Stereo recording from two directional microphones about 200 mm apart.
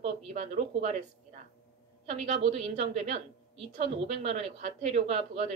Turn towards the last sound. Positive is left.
turn(degrees=-35)  # may be behind; listen again after turning